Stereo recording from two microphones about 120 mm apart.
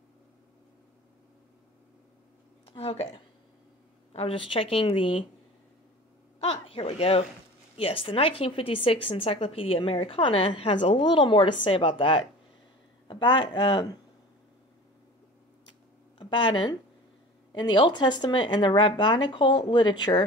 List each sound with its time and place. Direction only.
2.6 s a woman's voice: 55° left (ahead or behind)
4.1 s a woman's voice: 55° left (ahead or behind)
6.4 s a sound: 50° left (ahead or behind)
6.9 s a woman's voice: 55° left (ahead or behind); by 13.9 s 40° left (ahead or behind)
16.2 s speech: 40° left (ahead or behind)